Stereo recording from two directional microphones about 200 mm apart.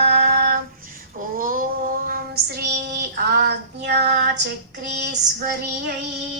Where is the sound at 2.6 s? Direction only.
55° right (ahead or behind).